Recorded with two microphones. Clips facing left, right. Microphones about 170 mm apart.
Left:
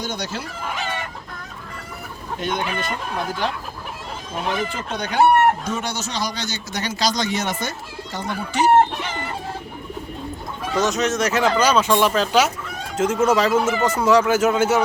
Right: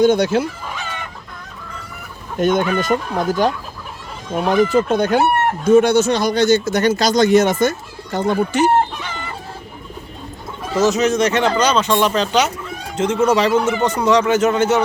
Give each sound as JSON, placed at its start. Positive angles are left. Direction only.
{"t": 0.0, "sound": "speech", "side_deg": -55}
{"t": 2.4, "sound": "speech", "side_deg": -50}
{"t": 10.8, "sound": "a man's voice", "side_deg": 0}